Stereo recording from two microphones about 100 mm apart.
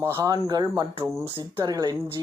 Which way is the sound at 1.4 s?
60° right (ahead or behind).